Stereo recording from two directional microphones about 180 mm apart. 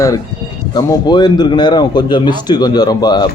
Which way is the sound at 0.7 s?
25° left (ahead or behind).